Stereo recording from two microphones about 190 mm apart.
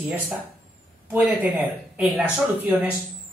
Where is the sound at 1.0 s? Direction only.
10° right (ahead or behind).